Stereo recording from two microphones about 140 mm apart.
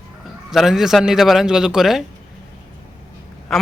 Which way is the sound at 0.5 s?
Centre (ahead or behind).